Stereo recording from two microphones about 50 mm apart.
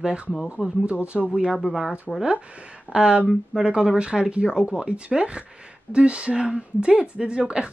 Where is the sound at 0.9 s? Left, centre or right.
Right.